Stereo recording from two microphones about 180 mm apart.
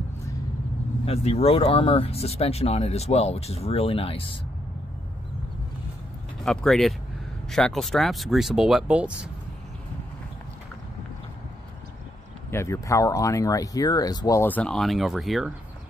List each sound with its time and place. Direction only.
1.0 s speech: 35° left (ahead or behind)
6.4 s speech: centre (ahead or behind)
12.4 s speech: 15° left (ahead or behind); by 15.5 s centre (ahead or behind)